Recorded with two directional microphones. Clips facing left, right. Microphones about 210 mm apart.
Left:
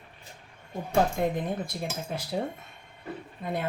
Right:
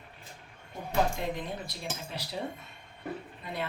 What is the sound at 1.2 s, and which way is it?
Speech, 50° left (ahead or behind).